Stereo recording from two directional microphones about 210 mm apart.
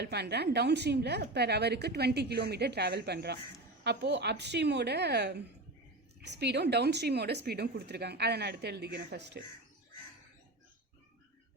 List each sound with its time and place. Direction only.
0.0 s a woman's voice: 50° right (ahead or behind)